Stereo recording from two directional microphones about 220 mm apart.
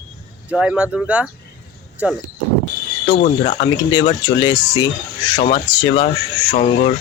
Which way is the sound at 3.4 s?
25° left (ahead or behind).